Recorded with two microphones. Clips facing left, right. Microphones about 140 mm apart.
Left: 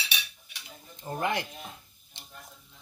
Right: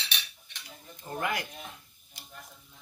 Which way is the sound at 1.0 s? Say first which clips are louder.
Left 3 dB; 25° left (ahead or behind).